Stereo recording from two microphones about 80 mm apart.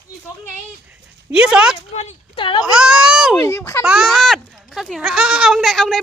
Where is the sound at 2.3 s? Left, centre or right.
Left.